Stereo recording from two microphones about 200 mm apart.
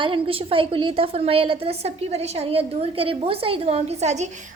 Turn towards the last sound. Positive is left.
turn(degrees=-35)  # may be behind; listen again after turning